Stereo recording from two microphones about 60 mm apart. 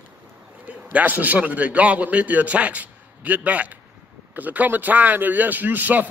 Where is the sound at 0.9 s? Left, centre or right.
Right.